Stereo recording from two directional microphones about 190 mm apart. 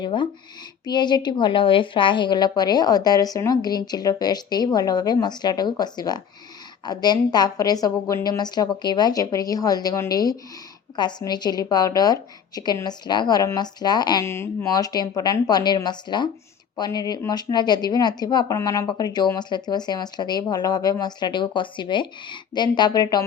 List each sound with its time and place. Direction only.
0.0 s a woman's voice: 25° left (ahead or behind)